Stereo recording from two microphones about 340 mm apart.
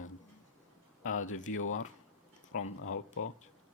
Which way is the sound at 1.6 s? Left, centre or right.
Left.